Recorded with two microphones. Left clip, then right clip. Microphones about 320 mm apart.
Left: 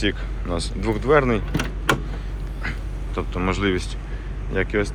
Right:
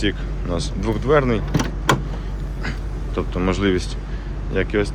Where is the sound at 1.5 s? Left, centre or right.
Right.